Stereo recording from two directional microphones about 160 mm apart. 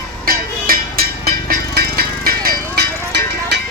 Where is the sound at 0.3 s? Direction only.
65° right (ahead or behind).